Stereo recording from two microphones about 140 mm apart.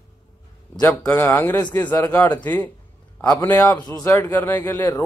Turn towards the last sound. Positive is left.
turn(degrees=15)  # may be behind; listen again after turning